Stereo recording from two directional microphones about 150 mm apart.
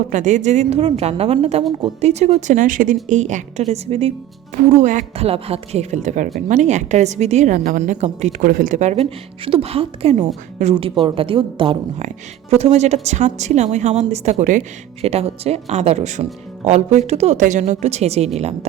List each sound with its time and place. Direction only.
0.1 s a woman's voice: 55° right (ahead or behind)
4.7 s a woman's voice: 55° right (ahead or behind)
15.0 s a woman's voice: 45° right (ahead or behind)